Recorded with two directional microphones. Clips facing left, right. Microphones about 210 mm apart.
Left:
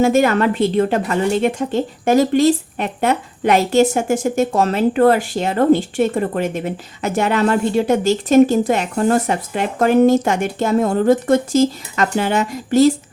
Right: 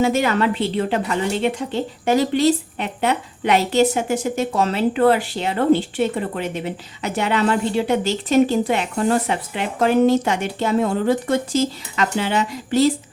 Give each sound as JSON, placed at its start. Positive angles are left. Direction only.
{"t": 0.0, "sound": "speech", "side_deg": 50}